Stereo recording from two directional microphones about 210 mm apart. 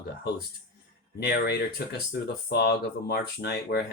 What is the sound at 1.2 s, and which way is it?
Speech, 50° left (ahead or behind).